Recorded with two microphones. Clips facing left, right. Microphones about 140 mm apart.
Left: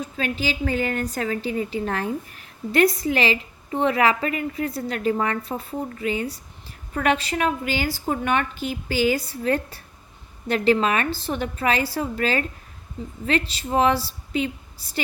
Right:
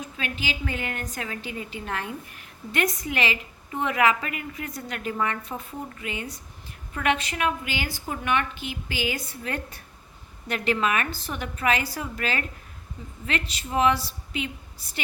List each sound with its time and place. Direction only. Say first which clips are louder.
0.0 s a woman's voice: left 6 dB; 35° left (ahead or behind)